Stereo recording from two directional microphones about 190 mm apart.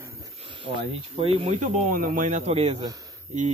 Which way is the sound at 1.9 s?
45° right (ahead or behind).